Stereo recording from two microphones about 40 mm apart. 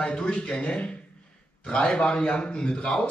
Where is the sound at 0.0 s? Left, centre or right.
Left.